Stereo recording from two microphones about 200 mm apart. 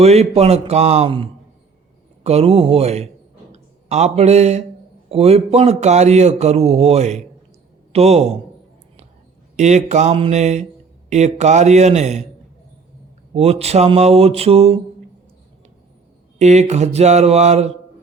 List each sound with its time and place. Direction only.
0.0 s a man's voice: 30° right (ahead or behind)
9.6 s a man's voice: 35° right (ahead or behind)
13.3 s a man's voice: 30° right (ahead or behind)
16.4 s a man's voice: 35° right (ahead or behind)